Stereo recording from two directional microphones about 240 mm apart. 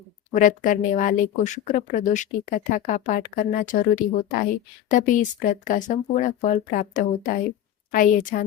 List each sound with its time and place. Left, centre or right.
0.3 s speech: left